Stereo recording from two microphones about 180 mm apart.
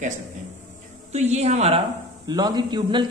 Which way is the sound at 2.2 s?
25° right (ahead or behind).